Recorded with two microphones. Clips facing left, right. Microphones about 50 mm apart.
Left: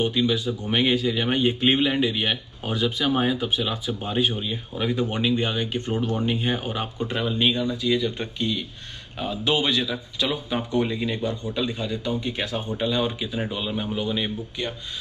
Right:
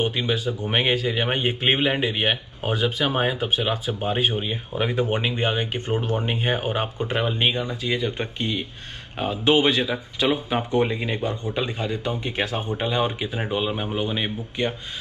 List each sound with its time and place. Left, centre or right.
0.0 s speech: right